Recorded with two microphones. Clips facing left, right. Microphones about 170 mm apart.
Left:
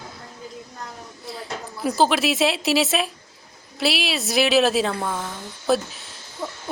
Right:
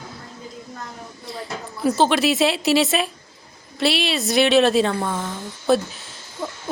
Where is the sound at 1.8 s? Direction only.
Centre (ahead or behind).